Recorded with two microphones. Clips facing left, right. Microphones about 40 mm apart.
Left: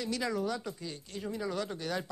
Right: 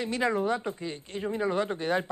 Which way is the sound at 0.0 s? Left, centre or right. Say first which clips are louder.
Right 6 dB; right.